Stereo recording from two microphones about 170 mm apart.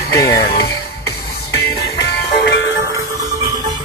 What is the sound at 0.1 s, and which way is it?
Speech, 20° left (ahead or behind).